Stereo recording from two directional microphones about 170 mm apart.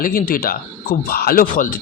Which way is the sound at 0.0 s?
60° left (ahead or behind).